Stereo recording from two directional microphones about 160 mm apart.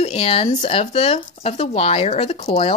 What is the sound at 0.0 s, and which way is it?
Speech, 40° left (ahead or behind).